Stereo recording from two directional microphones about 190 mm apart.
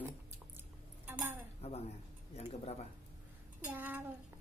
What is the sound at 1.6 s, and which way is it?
Speech, 30° left (ahead or behind).